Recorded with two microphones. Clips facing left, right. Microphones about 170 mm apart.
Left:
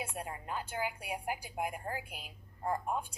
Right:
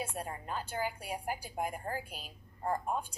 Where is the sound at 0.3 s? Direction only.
15° left (ahead or behind).